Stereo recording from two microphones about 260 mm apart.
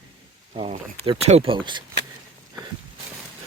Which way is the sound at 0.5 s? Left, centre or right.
Right.